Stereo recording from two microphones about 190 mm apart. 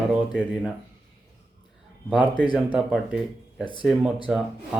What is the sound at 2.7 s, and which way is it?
Speech, centre (ahead or behind).